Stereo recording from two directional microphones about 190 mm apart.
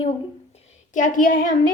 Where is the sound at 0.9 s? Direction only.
45° left (ahead or behind).